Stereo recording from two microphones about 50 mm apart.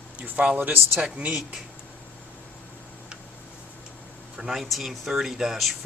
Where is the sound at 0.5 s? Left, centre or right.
Right.